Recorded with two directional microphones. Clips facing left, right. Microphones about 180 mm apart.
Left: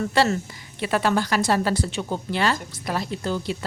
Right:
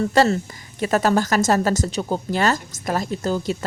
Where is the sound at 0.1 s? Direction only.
40° right (ahead or behind).